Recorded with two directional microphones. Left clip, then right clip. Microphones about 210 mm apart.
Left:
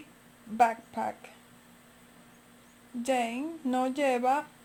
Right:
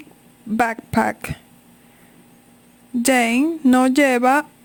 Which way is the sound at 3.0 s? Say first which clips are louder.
Right 13 dB; 45° right (ahead or behind).